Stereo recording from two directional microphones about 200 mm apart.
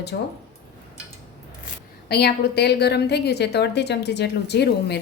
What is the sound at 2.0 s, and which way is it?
A woman's voice, 55° left (ahead or behind).